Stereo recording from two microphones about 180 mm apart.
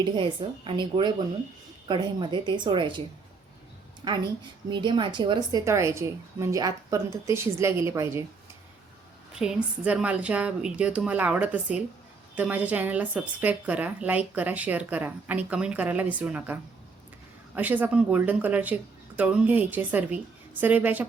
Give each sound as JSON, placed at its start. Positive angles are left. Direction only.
{"t": 0.0, "sound": "speech", "side_deg": -30}
{"t": 4.0, "sound": "a woman's voice", "side_deg": -25}
{"t": 9.3, "sound": "a woman's voice", "side_deg": -5}